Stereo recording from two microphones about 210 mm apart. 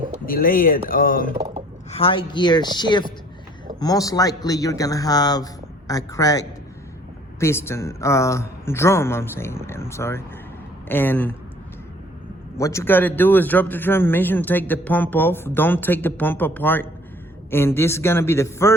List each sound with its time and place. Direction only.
0.3 s speech: 45° left (ahead or behind)
1.9 s a man's voice: 25° left (ahead or behind); by 11.3 s 10° left (ahead or behind)
12.5 s a man's voice: 15° left (ahead or behind)